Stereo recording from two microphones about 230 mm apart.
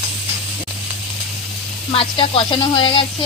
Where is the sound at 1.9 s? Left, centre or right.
Left.